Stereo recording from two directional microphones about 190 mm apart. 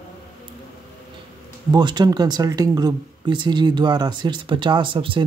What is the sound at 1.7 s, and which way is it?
Speech, 25° right (ahead or behind).